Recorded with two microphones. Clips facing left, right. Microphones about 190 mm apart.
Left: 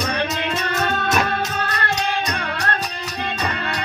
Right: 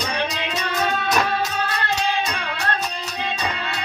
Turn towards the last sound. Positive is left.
turn(degrees=55)  # may be behind; listen again after turning